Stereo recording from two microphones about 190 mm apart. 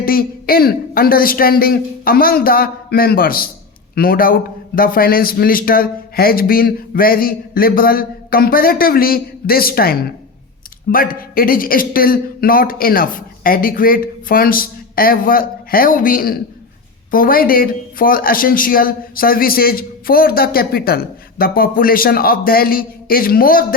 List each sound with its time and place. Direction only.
0.0 s a man's voice: 50° left (ahead or behind)